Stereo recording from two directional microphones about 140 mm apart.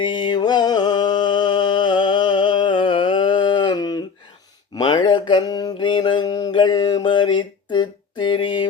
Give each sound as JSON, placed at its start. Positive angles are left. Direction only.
{"t": 0.0, "sound": "music", "side_deg": 35}
{"t": 4.7, "sound": "mantra", "side_deg": 30}